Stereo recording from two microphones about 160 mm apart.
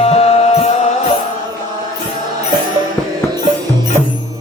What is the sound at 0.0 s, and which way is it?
Music, 40° left (ahead or behind).